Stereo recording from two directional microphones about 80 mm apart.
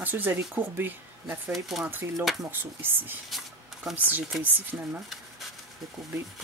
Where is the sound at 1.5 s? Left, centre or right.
Centre.